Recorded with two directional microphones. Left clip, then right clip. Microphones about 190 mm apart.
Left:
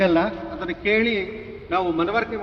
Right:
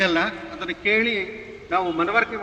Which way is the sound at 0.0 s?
35° left (ahead or behind).